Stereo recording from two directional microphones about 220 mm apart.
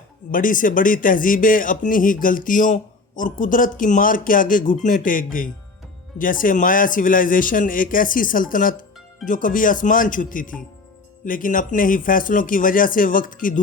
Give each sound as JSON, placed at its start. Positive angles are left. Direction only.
{"t": 0.3, "sound": "speech", "side_deg": 40}